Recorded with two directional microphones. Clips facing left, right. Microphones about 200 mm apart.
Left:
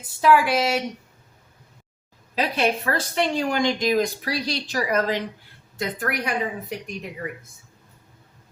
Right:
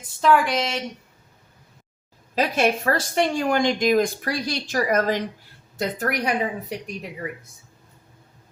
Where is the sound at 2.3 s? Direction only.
45° right (ahead or behind).